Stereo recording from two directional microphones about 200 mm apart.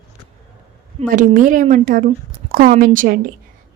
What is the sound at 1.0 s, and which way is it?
A woman's voice, 40° right (ahead or behind).